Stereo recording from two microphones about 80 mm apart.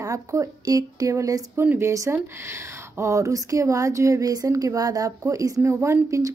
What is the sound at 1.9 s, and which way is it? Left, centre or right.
A woman's voice, right.